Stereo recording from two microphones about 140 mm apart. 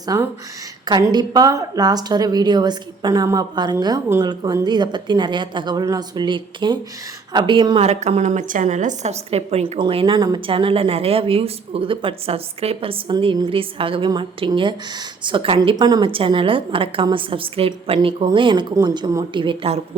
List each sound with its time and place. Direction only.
0.0 s a woman's voice: 25° right (ahead or behind)
7.8 s a woman's voice: 50° right (ahead or behind)
15.7 s a woman's voice: 30° right (ahead or behind)